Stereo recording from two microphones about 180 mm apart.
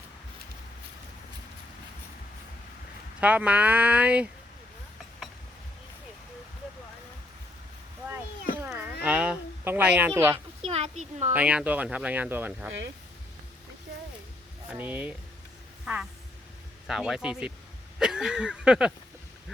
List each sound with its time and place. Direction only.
3.2 s speech: 5° right (ahead or behind)
9.0 s a sound: 5° right (ahead or behind)
10.3 s speech: 35° right (ahead or behind)
11.3 s speech: 5° right (ahead or behind)
14.7 s speech: 10° right (ahead or behind)
18.0 s a sound: 5° right (ahead or behind)